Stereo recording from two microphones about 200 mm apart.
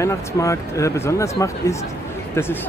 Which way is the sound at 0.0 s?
15° left (ahead or behind).